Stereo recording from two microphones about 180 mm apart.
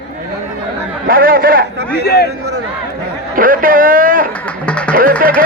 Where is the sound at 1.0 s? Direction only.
55° right (ahead or behind).